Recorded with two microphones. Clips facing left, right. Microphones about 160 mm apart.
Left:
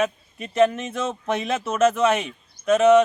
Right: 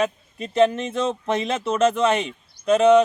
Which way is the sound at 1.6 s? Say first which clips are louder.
Even; 30° right (ahead or behind).